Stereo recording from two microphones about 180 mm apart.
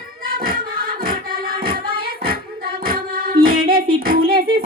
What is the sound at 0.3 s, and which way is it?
Music, 55° right (ahead or behind).